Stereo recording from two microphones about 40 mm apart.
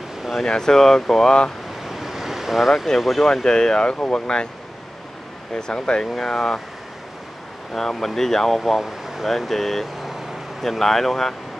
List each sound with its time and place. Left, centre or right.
0.5 s speech: centre
1.9 s vehicle: centre
3.0 s speech: centre
3.4 s speech: centre
5.5 s speech: centre
7.7 s speech: centre
9.5 s speech: centre